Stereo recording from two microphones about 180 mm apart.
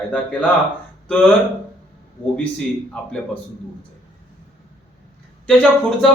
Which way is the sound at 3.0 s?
5° left (ahead or behind).